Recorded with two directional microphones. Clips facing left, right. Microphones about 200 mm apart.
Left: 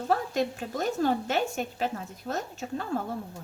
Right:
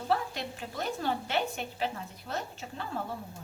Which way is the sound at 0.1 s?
45° left (ahead or behind).